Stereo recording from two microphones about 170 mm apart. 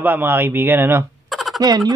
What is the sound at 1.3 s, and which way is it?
Fowl, centre (ahead or behind).